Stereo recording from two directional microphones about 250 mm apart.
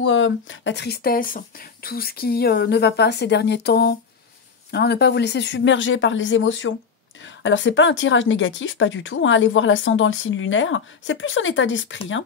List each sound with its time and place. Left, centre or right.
0.0 s a woman's voice: left